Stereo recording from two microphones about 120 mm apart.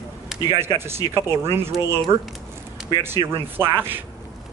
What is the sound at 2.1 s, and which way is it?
Speech, 40° right (ahead or behind).